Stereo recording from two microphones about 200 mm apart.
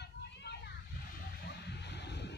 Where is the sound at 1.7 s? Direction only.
60° left (ahead or behind).